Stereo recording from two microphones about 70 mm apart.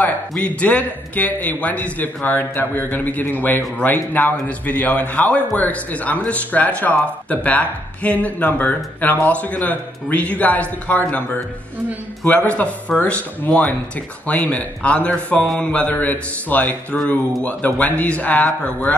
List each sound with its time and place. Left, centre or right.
0.4 s a man's voice: left
12.4 s a man's voice: centre
15.4 s speech: centre
15.7 s a man's voice: left